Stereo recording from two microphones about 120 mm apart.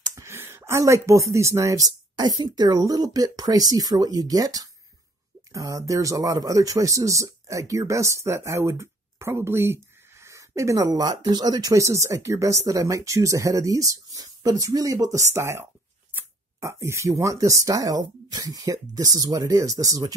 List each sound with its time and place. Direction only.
0.0 s speech: 25° right (ahead or behind)